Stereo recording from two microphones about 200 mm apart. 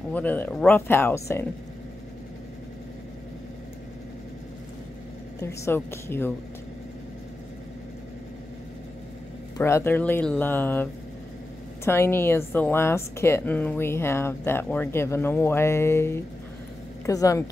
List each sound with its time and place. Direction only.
0.1 s a woman's voice: 10° left (ahead or behind)
5.4 s a woman's voice: 15° left (ahead or behind)
9.6 s a woman's voice: 10° left (ahead or behind)